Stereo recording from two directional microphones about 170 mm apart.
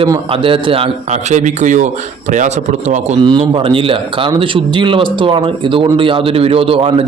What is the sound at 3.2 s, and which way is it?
Speech, 30° right (ahead or behind).